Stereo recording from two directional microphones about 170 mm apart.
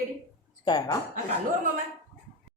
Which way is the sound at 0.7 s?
25° left (ahead or behind).